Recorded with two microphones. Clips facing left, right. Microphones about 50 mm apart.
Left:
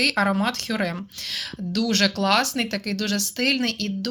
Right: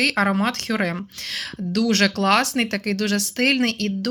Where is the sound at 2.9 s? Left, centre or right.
Right.